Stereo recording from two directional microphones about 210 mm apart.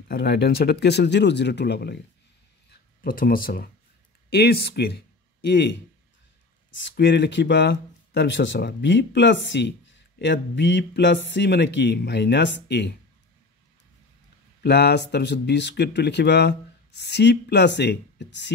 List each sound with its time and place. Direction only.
0.1 s speech: 50° left (ahead or behind)
3.0 s speech: 40° left (ahead or behind); by 5.8 s 55° left (ahead or behind)
6.8 s speech: 60° left (ahead or behind)
14.6 s speech: 50° left (ahead or behind)